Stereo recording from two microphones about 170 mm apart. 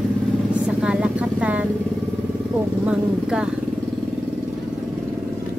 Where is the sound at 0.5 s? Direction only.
5° right (ahead or behind).